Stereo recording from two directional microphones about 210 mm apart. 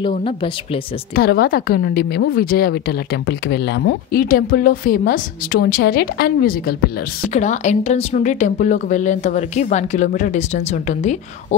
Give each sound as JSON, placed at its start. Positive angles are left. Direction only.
{"t": 0.1, "sound": "speech", "side_deg": 25}
{"t": 1.1, "sound": "a woman's voice", "side_deg": 45}
{"t": 7.3, "sound": "speech", "side_deg": 35}